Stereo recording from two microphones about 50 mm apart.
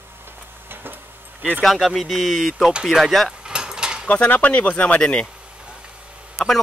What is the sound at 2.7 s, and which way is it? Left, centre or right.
Speech, centre.